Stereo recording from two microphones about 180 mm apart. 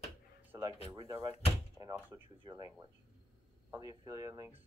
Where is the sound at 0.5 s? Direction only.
20° right (ahead or behind).